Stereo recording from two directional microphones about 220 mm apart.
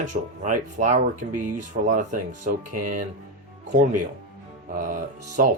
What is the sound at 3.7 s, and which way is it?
Speech, 35° right (ahead or behind).